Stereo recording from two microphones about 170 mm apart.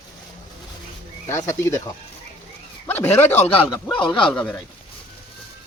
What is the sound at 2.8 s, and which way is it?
Speech, 10° left (ahead or behind).